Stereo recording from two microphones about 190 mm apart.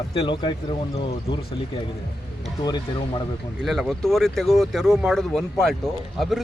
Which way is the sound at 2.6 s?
20° left (ahead or behind).